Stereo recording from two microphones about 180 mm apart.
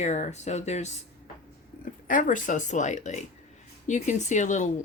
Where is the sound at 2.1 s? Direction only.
45° left (ahead or behind).